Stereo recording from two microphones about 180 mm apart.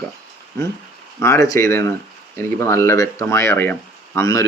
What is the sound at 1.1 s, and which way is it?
Speech, 15° left (ahead or behind).